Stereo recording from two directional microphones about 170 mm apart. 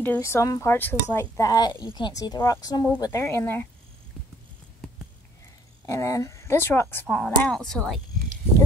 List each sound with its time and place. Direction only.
0.0 s speech: 15° left (ahead or behind)
5.9 s speech: 20° left (ahead or behind)